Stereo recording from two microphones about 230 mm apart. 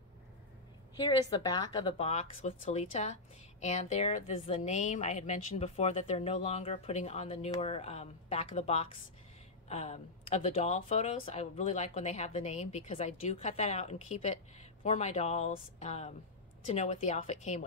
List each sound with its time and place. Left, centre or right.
0.9 s speech: left